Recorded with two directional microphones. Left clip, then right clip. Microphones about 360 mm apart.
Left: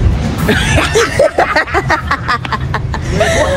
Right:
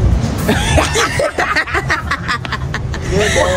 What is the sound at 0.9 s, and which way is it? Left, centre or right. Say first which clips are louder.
Music: left 5 dB; centre.